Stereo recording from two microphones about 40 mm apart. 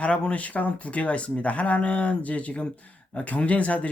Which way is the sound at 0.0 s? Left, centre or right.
Left.